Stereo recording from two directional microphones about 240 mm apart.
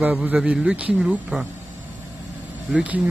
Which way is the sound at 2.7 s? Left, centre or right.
Centre.